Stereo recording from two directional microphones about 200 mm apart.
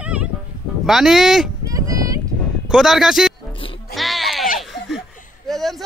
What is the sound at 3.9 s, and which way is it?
Sheep, centre (ahead or behind).